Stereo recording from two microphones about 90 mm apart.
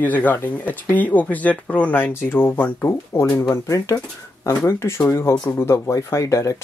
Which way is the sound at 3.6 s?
35° left (ahead or behind).